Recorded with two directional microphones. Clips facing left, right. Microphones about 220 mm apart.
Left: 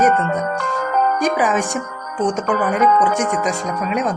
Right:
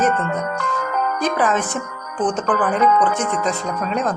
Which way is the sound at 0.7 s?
40° left (ahead or behind).